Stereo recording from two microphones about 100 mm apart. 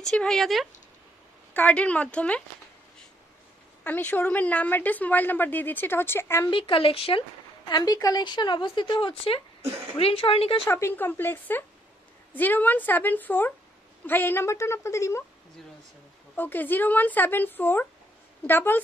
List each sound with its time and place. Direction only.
0.1 s speech: 5° left (ahead or behind)
1.5 s a woman's voice: 15° left (ahead or behind)
3.8 s a woman's voice: 20° left (ahead or behind)
6.5 s speech: 60° left (ahead or behind)
7.6 s a woman's voice: 40° left (ahead or behind); by 10.7 s 70° left (ahead or behind)
10.7 s a woman's voice: 25° left (ahead or behind)
16.3 s a woman's voice: 20° left (ahead or behind)